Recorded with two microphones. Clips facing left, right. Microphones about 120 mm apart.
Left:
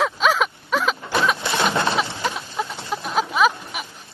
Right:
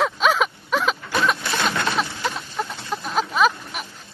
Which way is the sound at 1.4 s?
25° left (ahead or behind).